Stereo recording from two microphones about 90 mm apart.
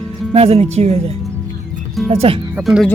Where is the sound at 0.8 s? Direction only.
90° right.